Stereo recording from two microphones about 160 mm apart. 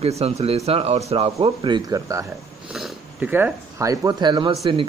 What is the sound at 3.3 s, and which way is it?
Speech, 15° right (ahead or behind).